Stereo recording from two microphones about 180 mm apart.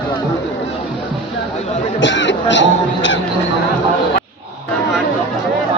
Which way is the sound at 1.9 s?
90° left.